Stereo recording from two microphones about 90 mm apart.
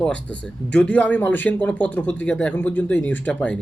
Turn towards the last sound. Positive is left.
turn(degrees=10)  # may be behind; listen again after turning